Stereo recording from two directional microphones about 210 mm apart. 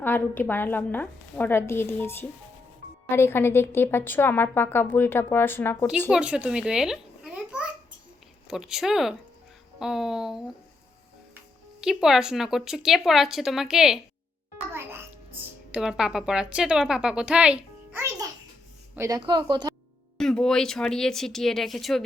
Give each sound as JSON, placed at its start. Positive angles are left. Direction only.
{"t": 0.0, "sound": "a woman's voice", "side_deg": 10}
{"t": 6.1, "sound": "babbling", "side_deg": -5}
{"t": 8.4, "sound": "speech", "side_deg": 0}
{"t": 11.8, "sound": "speech", "side_deg": 0}
{"t": 14.7, "sound": "music", "side_deg": -10}
{"t": 15.7, "sound": "a woman's voice", "side_deg": -5}
{"t": 20.1, "sound": "speech", "side_deg": 5}